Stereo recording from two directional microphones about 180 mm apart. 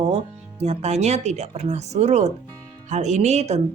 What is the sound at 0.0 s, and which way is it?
Speech, 35° right (ahead or behind).